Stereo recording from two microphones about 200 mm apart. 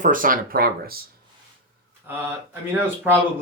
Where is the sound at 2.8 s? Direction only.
10° right (ahead or behind).